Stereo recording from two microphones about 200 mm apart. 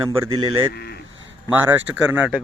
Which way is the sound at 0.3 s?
20° right (ahead or behind).